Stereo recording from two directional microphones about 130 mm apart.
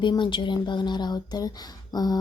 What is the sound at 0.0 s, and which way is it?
Speech, 35° left (ahead or behind).